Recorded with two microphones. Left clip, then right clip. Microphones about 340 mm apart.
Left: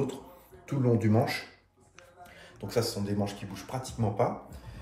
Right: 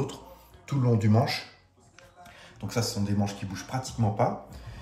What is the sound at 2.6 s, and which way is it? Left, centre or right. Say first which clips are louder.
Speech: left 1 dB; right.